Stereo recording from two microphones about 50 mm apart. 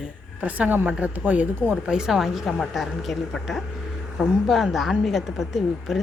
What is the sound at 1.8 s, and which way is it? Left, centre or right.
A woman's voice, centre.